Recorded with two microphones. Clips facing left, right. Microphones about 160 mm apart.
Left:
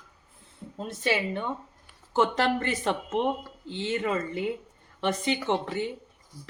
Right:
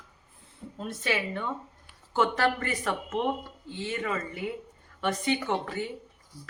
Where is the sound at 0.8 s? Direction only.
25° left (ahead or behind).